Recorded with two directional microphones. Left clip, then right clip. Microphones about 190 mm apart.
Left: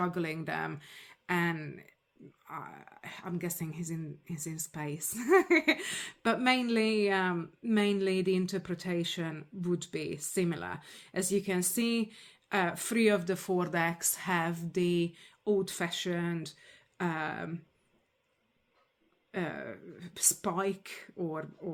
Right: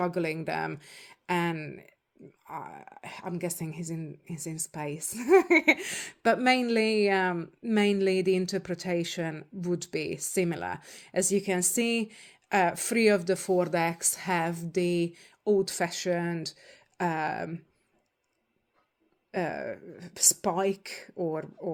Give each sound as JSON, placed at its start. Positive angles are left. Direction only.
{"t": 0.0, "sound": "speech", "side_deg": -25}
{"t": 19.3, "sound": "speech", "side_deg": -25}